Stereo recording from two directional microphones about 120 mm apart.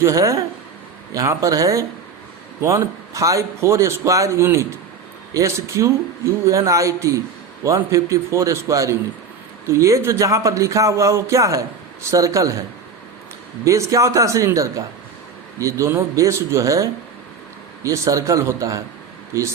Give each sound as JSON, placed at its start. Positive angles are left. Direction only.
{"t": 0.0, "sound": "speech", "side_deg": -25}
{"t": 13.7, "sound": "speech", "side_deg": -25}